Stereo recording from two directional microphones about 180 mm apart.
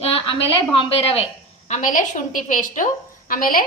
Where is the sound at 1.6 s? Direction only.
45° left (ahead or behind).